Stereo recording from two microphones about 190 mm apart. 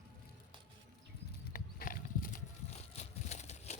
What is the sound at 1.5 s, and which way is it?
Horse, 45° left (ahead or behind).